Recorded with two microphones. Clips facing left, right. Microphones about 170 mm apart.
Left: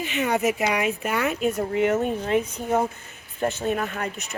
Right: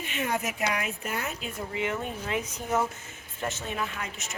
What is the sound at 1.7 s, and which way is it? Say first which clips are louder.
Speech: left 6 dB; 45° left (ahead or behind).